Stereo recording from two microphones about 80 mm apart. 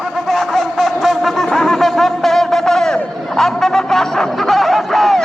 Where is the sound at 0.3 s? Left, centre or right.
Centre.